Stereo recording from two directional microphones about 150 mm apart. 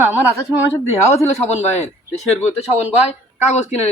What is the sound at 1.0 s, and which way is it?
Speech, 20° left (ahead or behind).